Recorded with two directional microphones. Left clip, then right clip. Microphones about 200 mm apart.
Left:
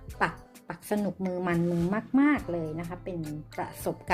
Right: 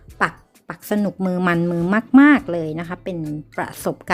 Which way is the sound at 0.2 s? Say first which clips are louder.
Right 8 dB; 25° right (ahead or behind).